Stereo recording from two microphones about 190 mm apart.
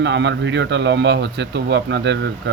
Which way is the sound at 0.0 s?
70° right (ahead or behind).